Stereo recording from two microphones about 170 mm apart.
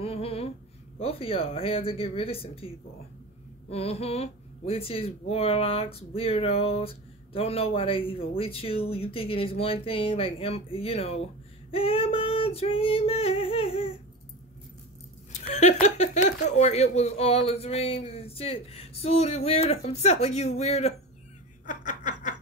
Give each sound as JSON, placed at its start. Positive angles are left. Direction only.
{"t": 0.0, "sound": "a sound", "side_deg": 35}
{"t": 1.0, "sound": "speech", "side_deg": 35}
{"t": 3.7, "sound": "speech", "side_deg": 35}
{"t": 15.5, "sound": "speech", "side_deg": 45}
{"t": 21.6, "sound": "snicker", "side_deg": 45}